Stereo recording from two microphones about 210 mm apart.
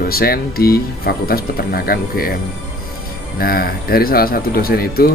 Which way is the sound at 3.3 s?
45° left (ahead or behind).